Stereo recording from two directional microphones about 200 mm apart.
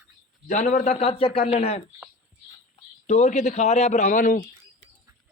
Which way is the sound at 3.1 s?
35° left (ahead or behind).